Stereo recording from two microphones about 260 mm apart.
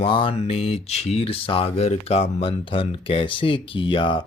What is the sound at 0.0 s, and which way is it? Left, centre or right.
Speech, centre.